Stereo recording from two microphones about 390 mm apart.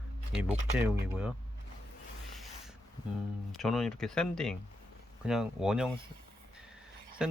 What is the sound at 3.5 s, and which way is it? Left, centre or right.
Speech, centre.